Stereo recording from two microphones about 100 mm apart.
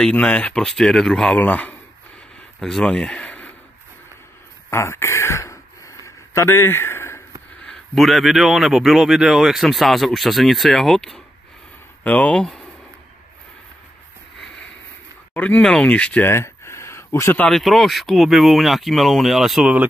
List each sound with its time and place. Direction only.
0.0 s a man's voice: 15° left (ahead or behind)
1.4 s speech: 15° left (ahead or behind)
2.6 s a man's voice: 5° left (ahead or behind)
4.6 s a sound: 30° left (ahead or behind)
7.6 s a man's voice: centre (ahead or behind)
12.0 s speech: 15° left (ahead or behind)
15.3 s speech: 15° left (ahead or behind)
16.3 s a sound: 25° left (ahead or behind)
17.5 s a man's voice: centre (ahead or behind)